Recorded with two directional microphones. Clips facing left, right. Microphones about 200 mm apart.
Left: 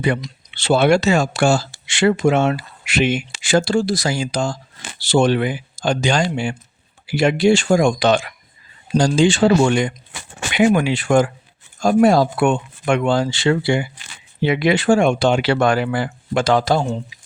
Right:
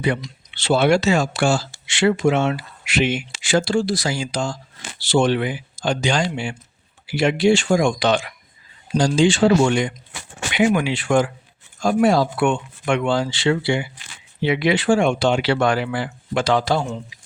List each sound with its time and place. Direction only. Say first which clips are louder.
0.0 s speech: left 2 dB; 50° left (ahead or behind)